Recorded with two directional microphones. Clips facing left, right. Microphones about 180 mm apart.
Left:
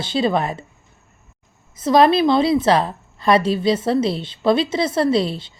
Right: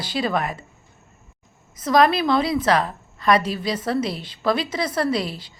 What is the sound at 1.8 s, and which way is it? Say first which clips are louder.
A woman's voice: left 4 dB; 30° left (ahead or behind).